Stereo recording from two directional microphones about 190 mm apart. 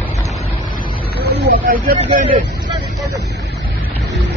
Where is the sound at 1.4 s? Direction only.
50° right (ahead or behind).